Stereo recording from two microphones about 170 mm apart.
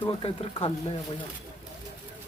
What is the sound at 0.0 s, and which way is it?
Speech, 30° left (ahead or behind).